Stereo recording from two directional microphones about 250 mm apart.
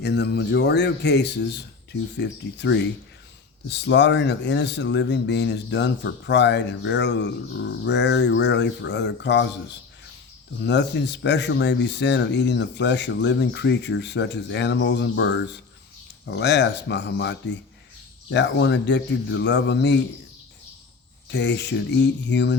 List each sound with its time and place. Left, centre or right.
0.0 s speech: left
10.6 s speech: left
21.2 s speech: left